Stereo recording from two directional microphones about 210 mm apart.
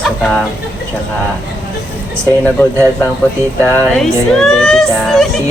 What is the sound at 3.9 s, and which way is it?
Speech, centre (ahead or behind).